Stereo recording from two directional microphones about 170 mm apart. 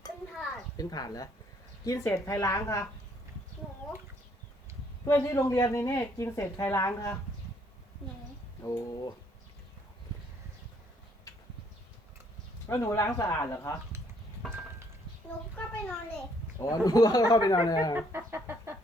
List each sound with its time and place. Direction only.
0.8 s speech: 20° left (ahead or behind)
5.0 s speech: 15° left (ahead or behind)
8.6 s speech: 20° left (ahead or behind)
12.6 s speech: 15° left (ahead or behind)
15.5 s a sound: centre (ahead or behind)
16.6 s speech: 20° left (ahead or behind)
17.9 s music: 15° right (ahead or behind)